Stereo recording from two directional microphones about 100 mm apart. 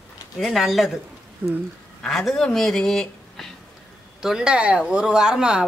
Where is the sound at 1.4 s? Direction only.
15° right (ahead or behind).